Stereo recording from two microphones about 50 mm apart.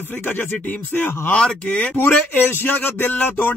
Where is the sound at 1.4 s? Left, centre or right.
Centre.